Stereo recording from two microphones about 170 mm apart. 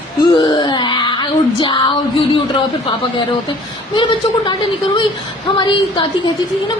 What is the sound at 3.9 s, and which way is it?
Speech, 30° left (ahead or behind).